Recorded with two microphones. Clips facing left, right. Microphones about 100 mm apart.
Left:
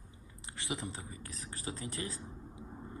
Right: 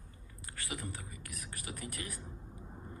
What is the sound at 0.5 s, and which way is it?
Speech, 25° left (ahead or behind).